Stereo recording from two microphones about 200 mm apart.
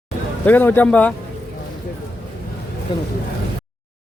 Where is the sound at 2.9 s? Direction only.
25° left (ahead or behind).